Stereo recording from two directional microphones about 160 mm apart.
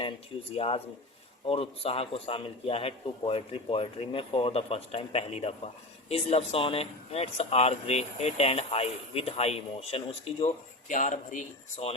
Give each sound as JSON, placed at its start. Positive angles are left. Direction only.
{"t": 0.5, "sound": "speech", "side_deg": 35}